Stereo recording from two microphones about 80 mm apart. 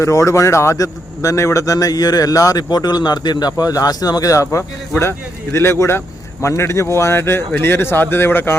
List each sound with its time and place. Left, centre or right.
0.0 s a man's voice: left